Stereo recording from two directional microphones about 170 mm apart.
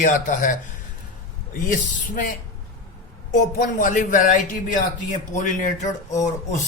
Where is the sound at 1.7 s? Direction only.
50° left (ahead or behind).